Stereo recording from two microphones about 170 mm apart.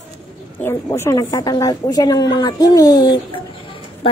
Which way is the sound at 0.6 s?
15° left (ahead or behind).